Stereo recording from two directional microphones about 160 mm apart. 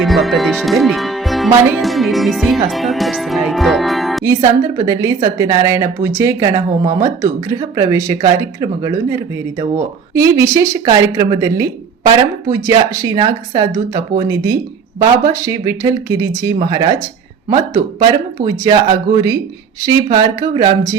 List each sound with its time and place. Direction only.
0.0 s speech: centre (ahead or behind)
4.2 s speech: 20° right (ahead or behind)
18.4 s speech: 25° right (ahead or behind)